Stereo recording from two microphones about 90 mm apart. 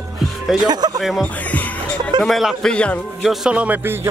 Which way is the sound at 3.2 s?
10° right (ahead or behind).